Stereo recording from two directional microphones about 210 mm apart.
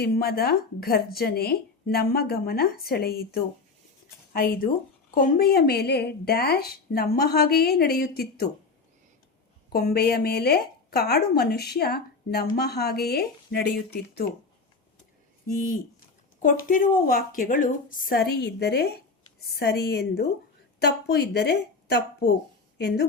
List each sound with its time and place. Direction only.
0.0 s a woman's voice: 45° left (ahead or behind)
9.7 s a woman's voice: 50° left (ahead or behind)
15.4 s a woman's voice: 40° left (ahead or behind)